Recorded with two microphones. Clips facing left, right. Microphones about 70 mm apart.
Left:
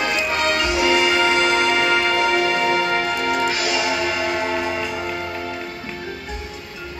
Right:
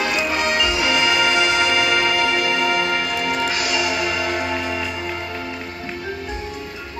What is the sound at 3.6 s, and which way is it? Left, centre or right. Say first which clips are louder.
Music: even; left.